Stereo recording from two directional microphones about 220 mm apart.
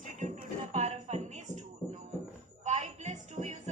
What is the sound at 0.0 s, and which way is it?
Music, 35° right (ahead or behind).